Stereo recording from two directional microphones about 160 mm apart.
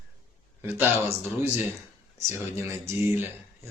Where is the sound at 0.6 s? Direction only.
15° right (ahead or behind).